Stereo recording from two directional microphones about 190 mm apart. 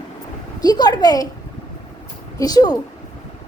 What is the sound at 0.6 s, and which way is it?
Speech, 20° left (ahead or behind).